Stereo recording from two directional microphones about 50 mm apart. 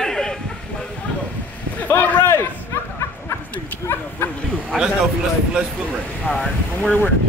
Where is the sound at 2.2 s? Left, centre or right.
Left.